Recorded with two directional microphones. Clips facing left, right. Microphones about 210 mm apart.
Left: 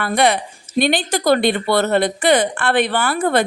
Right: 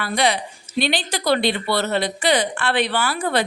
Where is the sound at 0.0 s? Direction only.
55° left (ahead or behind).